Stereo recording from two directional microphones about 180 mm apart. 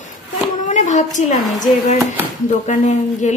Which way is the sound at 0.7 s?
40° left (ahead or behind).